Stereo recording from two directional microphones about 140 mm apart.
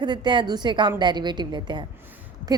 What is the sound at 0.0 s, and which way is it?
A woman's voice, 30° right (ahead or behind).